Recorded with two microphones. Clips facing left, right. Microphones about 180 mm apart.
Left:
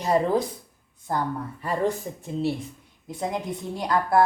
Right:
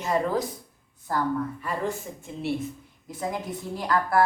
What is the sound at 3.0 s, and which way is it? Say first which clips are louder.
A woman's voice: left 2 dB; 25° left (ahead or behind).